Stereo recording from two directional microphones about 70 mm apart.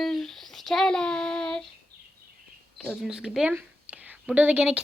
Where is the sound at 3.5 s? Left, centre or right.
Right.